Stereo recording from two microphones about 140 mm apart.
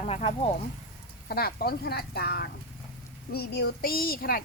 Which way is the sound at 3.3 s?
90° left.